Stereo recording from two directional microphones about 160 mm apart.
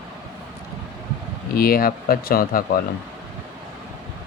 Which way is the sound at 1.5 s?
70° left (ahead or behind).